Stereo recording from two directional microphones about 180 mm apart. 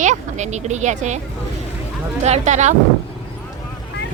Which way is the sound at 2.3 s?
40° right (ahead or behind).